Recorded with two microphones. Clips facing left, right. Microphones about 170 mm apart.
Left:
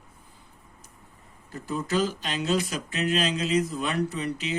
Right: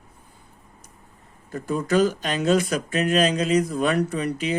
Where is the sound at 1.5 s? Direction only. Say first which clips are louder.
Right 6 dB; 50° right (ahead or behind).